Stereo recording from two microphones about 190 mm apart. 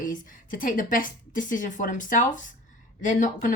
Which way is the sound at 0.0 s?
45° left (ahead or behind).